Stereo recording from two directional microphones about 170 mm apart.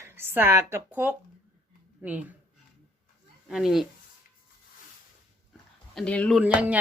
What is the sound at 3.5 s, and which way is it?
Speech, 5° right (ahead or behind).